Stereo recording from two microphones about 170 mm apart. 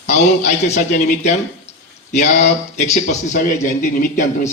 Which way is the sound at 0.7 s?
45° left (ahead or behind).